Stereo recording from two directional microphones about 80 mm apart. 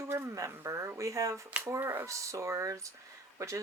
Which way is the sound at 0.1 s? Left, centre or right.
Right.